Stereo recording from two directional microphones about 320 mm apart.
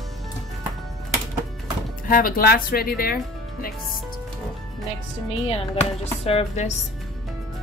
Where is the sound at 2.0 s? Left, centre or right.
Left.